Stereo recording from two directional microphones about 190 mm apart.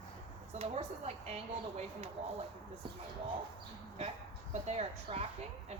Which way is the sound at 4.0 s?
35° right (ahead or behind).